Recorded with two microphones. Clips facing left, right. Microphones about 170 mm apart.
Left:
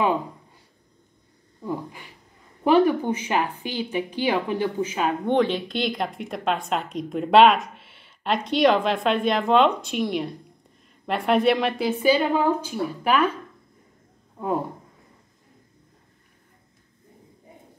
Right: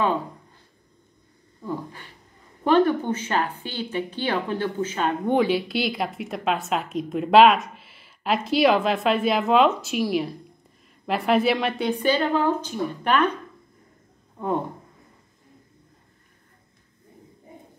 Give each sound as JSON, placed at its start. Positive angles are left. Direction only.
{"t": 1.6, "sound": "a woman's voice", "side_deg": 10}
{"t": 5.2, "sound": "a woman's voice", "side_deg": -5}